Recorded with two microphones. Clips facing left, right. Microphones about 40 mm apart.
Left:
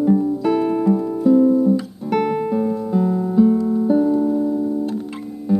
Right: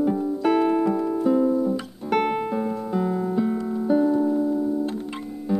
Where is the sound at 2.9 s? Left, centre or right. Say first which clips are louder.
Left 6 dB; right.